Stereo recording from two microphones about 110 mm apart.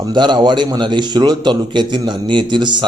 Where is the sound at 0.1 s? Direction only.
45° right (ahead or behind).